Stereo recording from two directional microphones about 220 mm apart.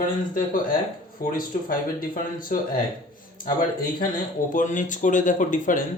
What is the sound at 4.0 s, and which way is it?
Speech, 35° left (ahead or behind).